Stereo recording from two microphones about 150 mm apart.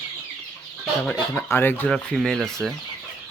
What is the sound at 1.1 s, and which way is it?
Speech, 15° left (ahead or behind).